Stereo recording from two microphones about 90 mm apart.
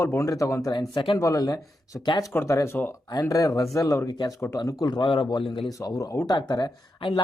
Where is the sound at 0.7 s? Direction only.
50° left (ahead or behind).